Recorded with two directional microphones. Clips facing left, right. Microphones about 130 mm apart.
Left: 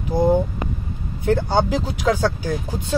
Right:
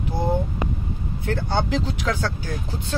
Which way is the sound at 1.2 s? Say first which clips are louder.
Left 6 dB; 20° left (ahead or behind).